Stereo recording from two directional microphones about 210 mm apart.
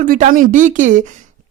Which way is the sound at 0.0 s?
40° right (ahead or behind).